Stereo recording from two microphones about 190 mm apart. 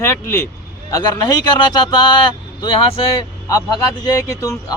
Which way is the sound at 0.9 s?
20° left (ahead or behind).